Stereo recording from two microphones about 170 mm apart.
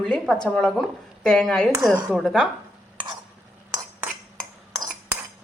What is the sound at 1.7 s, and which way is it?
Speech, 15° right (ahead or behind).